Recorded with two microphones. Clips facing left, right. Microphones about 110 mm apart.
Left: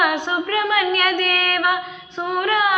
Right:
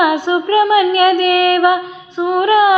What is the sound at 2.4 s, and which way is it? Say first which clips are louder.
Female singing: right 9 dB; 25° right (ahead or behind).